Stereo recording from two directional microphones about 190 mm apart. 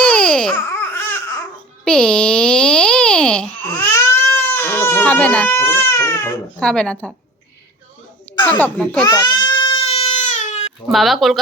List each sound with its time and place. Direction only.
0.0 s babbling: 5° left (ahead or behind)
1.8 s a sound: 5° left (ahead or behind)
3.9 s baby cry: 10° left (ahead or behind)
8.5 s speech: 5° left (ahead or behind)
9.0 s speech: 20° left (ahead or behind)
9.5 s baby cry: 25° left (ahead or behind)
10.9 s speech: centre (ahead or behind)